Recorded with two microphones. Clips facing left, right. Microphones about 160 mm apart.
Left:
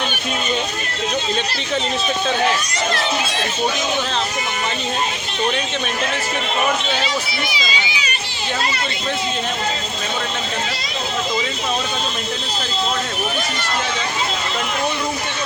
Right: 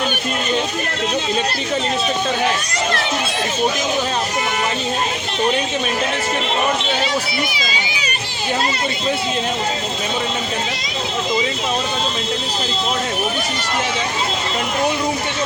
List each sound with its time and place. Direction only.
7.5 s run: 50° right (ahead or behind)